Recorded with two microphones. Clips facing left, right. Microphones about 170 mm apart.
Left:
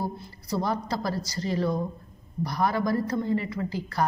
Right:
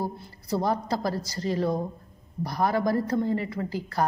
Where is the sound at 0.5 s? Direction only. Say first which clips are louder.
Right 2 dB; 50° right (ahead or behind).